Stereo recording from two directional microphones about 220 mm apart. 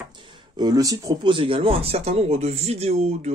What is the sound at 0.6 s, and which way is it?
Speech, 15° right (ahead or behind).